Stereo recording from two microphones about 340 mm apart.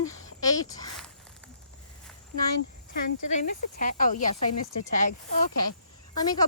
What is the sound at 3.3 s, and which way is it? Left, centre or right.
Speech, left.